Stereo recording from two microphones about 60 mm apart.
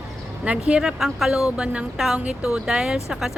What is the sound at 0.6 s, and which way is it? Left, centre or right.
Speech, centre.